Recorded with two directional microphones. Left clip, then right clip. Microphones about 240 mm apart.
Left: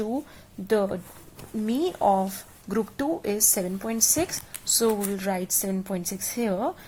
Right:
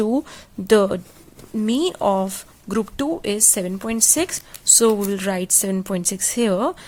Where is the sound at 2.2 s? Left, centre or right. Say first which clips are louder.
Right 4 dB; right.